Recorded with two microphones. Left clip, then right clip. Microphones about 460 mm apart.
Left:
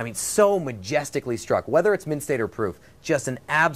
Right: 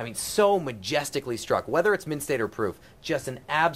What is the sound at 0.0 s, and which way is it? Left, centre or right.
Speech, centre.